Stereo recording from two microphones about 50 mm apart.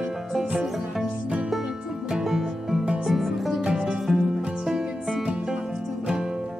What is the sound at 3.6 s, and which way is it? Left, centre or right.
Music, centre.